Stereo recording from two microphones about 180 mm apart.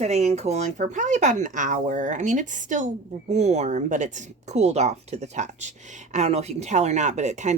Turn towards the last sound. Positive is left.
turn(degrees=-40)  # may be behind; listen again after turning